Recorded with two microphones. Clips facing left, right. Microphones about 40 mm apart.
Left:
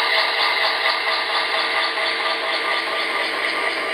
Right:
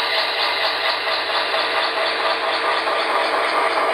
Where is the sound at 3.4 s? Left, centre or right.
Right.